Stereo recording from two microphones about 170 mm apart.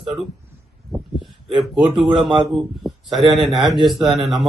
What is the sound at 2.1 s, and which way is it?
Mantra, 30° right (ahead or behind).